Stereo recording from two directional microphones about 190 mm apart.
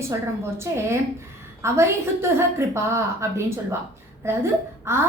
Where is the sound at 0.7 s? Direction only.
15° right (ahead or behind).